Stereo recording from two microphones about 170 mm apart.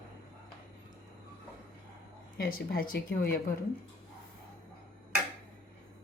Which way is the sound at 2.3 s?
65° left (ahead or behind).